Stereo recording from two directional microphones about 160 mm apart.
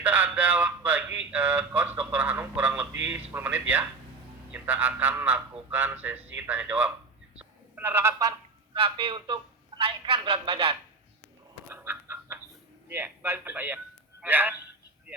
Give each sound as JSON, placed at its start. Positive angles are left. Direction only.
{"t": 0.0, "sound": "speech", "side_deg": -10}
{"t": 8.7, "sound": "a man's voice", "side_deg": -35}
{"t": 11.7, "sound": "chicken", "side_deg": -15}
{"t": 12.9, "sound": "a man's voice", "side_deg": -15}